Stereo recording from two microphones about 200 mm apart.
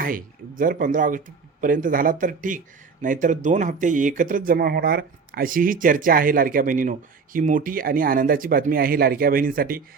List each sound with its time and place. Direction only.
0.0 s speech: 45° right (ahead or behind)